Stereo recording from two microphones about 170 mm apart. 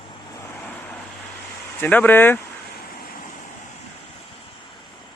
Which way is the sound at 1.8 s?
10° left (ahead or behind).